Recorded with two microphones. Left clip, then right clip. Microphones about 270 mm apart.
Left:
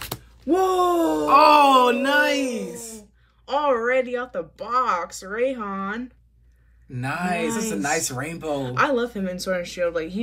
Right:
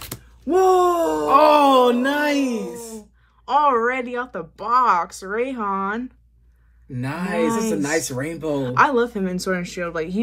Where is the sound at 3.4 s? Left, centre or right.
Centre.